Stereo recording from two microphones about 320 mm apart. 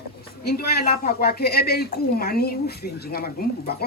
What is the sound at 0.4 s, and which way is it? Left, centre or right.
A woman's voice, left.